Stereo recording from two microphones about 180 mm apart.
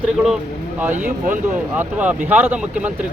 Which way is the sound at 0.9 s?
45° right (ahead or behind).